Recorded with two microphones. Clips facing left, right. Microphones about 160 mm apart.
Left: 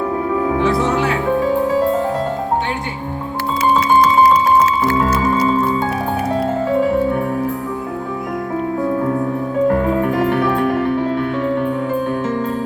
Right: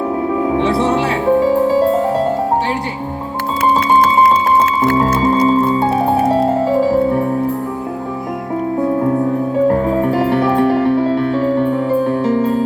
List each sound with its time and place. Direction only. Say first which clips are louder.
0.4 s music: right 2 dB; 25° right (ahead or behind)
3.6 s music: right 1 dB; 55° right (ahead or behind)
4.9 s music: right 3 dB; 30° right (ahead or behind)
9.6 s music: even; 30° right (ahead or behind)